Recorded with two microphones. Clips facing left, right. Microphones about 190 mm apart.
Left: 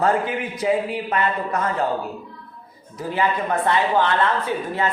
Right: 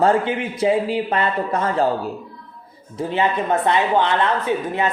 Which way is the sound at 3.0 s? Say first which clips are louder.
Right 2 dB; 25° right (ahead or behind).